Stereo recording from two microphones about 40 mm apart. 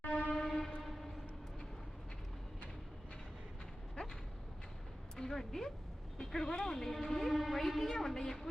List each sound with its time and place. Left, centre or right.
0.0 s train: left
0.3 s train: centre
5.1 s speech: centre